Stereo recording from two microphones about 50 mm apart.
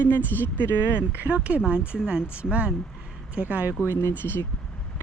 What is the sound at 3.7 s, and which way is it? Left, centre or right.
Speech, left.